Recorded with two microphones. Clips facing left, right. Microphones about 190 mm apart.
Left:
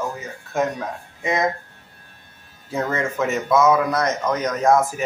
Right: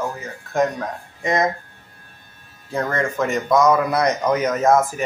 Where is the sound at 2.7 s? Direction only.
5° left (ahead or behind).